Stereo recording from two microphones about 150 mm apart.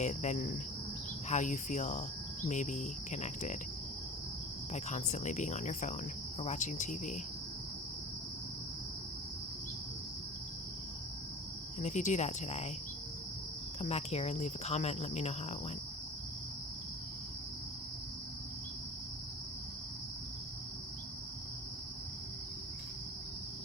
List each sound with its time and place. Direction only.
0.0 s speech: 50° left (ahead or behind)
4.7 s speech: 50° left (ahead or behind)
11.8 s speech: 50° left (ahead or behind)
13.8 s speech: 45° left (ahead or behind)